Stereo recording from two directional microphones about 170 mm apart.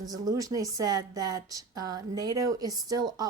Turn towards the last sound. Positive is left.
turn(degrees=-20)  # may be behind; listen again after turning